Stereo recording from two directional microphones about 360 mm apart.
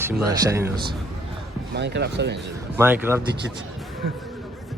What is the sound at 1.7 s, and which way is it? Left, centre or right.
Speech, right.